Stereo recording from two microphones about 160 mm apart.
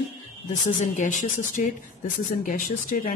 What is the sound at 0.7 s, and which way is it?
Speech, 50° left (ahead or behind).